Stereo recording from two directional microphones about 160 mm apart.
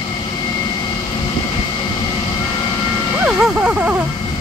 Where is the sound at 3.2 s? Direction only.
5° right (ahead or behind).